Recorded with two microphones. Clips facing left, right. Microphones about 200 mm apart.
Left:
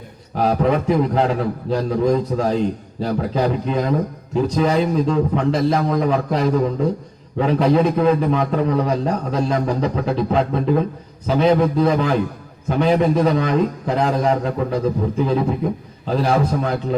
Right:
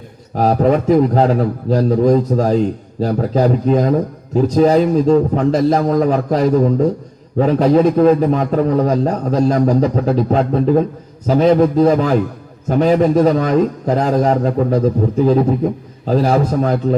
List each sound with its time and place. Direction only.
0.3 s a man's voice: 40° right (ahead or behind)
16.0 s a man's voice: 40° right (ahead or behind)